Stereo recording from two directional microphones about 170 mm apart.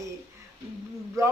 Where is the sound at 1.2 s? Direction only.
15° right (ahead or behind).